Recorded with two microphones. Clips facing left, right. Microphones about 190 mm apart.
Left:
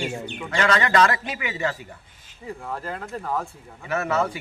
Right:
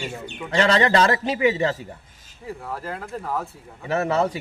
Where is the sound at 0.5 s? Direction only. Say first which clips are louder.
Right 3 dB; 35° right (ahead or behind).